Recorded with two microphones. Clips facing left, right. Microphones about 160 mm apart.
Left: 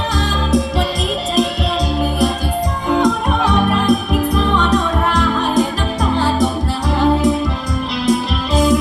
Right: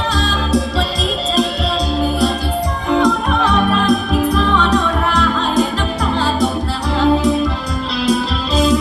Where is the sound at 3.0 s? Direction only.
20° left (ahead or behind).